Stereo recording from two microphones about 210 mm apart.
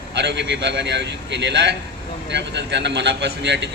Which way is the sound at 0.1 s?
55° right (ahead or behind).